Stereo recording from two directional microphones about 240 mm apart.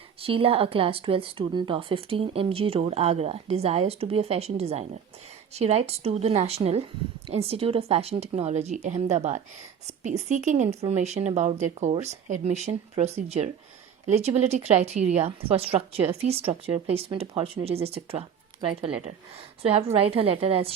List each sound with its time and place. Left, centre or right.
0.2 s speech: right